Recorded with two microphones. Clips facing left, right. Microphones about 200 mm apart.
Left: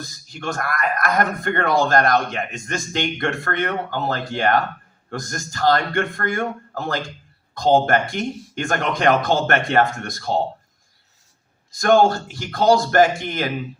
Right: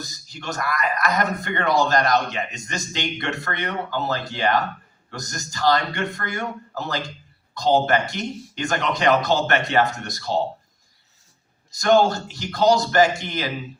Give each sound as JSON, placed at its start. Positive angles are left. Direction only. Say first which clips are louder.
{"t": 0.0, "sound": "speech", "louder": "left 4 dB", "side_deg": 55}
{"t": 11.7, "sound": "speech", "louder": "left 2 dB", "side_deg": 50}